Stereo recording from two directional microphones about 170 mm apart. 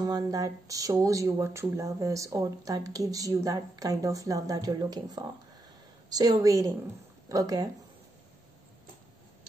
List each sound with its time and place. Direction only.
0.0 s speech: 20° right (ahead or behind)